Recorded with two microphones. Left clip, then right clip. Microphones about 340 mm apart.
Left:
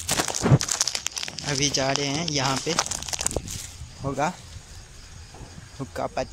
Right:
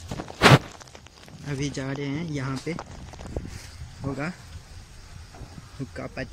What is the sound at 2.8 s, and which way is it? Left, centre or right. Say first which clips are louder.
Crumpling: left 13 dB; left.